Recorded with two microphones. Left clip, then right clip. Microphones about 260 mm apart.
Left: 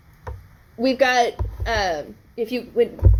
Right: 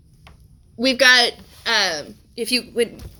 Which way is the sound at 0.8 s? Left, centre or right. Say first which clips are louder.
Right 3 dB; right.